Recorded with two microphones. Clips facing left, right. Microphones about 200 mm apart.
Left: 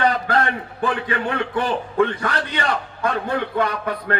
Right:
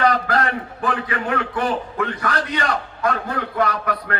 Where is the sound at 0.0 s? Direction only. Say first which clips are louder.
Even; 30° left (ahead or behind).